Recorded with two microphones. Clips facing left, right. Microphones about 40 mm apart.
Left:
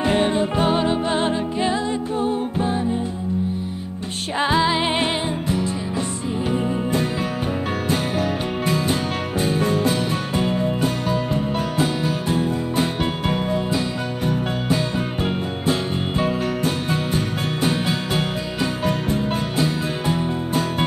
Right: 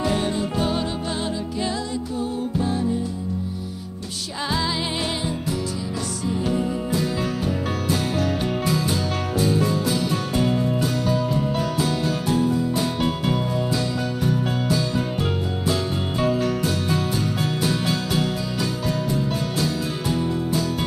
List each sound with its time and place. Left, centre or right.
0.0 s music: left
4.4 s music: left
9.4 s music: left
11.8 s music: left